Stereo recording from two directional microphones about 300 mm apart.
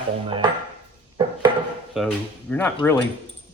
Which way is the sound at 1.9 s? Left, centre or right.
Centre.